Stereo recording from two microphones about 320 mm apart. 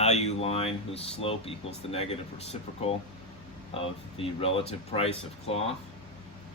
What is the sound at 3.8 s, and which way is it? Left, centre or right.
Speech, centre.